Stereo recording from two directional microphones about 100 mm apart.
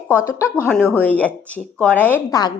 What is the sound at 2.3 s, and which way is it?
Speech, 45° left (ahead or behind).